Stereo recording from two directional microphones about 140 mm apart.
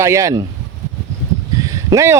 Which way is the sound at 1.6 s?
25° right (ahead or behind).